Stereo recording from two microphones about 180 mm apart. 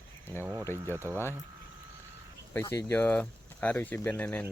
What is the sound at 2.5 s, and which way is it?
Speech, 15° left (ahead or behind).